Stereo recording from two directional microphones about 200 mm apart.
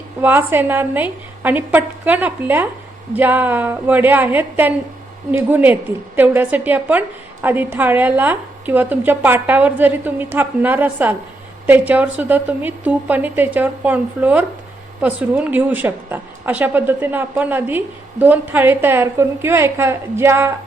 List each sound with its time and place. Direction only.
0.2 s a woman's voice: 10° right (ahead or behind)